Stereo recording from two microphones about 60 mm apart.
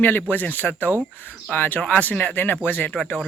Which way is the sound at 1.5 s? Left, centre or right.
Left.